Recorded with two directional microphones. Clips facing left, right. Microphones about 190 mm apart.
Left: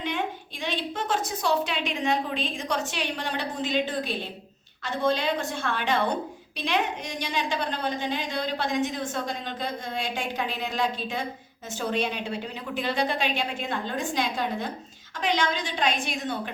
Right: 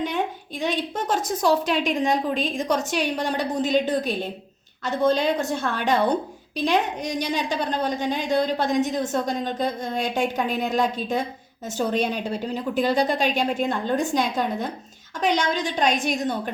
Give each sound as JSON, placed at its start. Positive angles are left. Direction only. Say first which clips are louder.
{"t": 0.6, "sound": "a woman's voice", "louder": "right 5 dB", "side_deg": -45}